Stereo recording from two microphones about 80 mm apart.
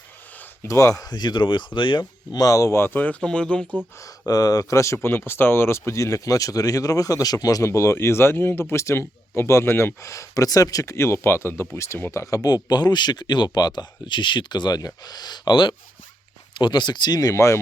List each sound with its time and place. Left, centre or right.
0.7 s speech: left
2.4 s speech: left; by 3.7 s centre
4.3 s speech: left
12.1 s speech: left